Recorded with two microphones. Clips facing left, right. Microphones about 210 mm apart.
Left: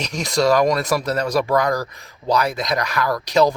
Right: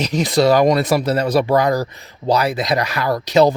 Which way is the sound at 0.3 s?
30° right (ahead or behind).